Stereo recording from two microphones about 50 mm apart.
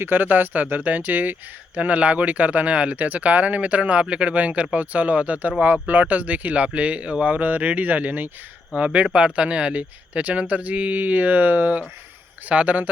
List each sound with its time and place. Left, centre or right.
0.0 s speech: right